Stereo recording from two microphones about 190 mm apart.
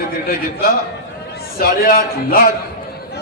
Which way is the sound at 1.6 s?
50° left (ahead or behind).